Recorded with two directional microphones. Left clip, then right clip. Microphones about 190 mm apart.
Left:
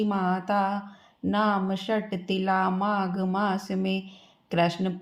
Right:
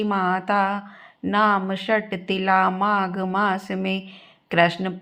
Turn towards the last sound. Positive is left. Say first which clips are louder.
# right 6 dB
turn(degrees=-15)  # may be behind; listen again after turning